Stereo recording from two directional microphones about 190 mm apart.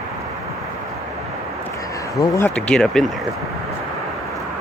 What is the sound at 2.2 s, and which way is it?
Speech, 15° left (ahead or behind).